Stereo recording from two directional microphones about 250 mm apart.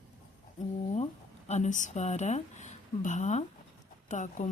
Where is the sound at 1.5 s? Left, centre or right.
Left.